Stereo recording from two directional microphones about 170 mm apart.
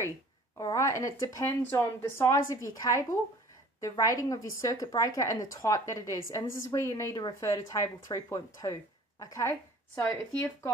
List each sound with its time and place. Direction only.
0.6 s a woman's voice: 20° left (ahead or behind)